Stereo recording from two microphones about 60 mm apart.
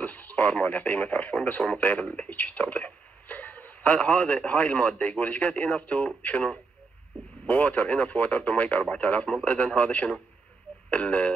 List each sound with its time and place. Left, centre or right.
0.0 s speech: left